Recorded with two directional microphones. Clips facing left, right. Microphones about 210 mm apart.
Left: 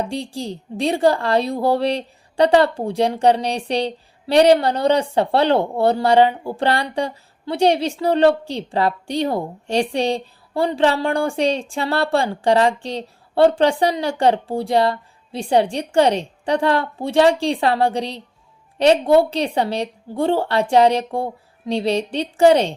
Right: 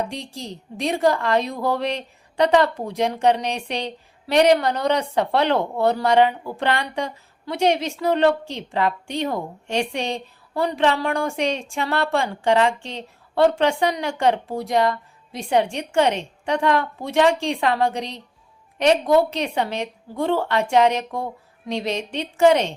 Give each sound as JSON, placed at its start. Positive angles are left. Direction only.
{"t": 0.0, "sound": "a woman's voice", "side_deg": 30}